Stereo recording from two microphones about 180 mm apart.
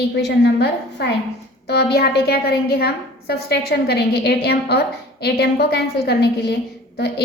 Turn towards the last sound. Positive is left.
turn(degrees=65)  # may be behind; listen again after turning